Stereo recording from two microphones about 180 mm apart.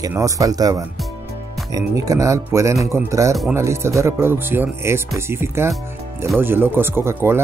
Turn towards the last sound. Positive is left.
turn(degrees=-15)  # may be behind; listen again after turning